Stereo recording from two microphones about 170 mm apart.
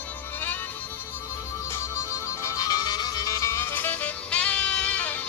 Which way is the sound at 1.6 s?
15° left (ahead or behind).